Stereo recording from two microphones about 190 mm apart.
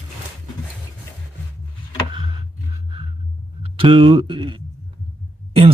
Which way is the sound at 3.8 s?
25° right (ahead or behind).